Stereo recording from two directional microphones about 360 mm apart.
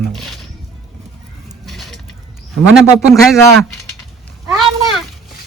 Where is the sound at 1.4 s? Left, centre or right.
Centre.